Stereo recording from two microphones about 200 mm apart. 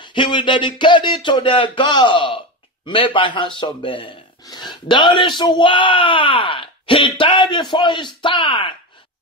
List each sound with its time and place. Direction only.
0.0 s speech: 25° left (ahead or behind)